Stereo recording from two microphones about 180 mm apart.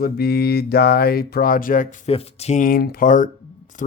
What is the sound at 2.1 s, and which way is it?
Speech, 35° left (ahead or behind).